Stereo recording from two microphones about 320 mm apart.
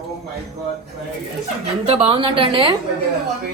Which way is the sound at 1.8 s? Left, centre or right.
Centre.